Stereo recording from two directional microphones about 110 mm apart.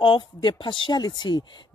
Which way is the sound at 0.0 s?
45° left (ahead or behind).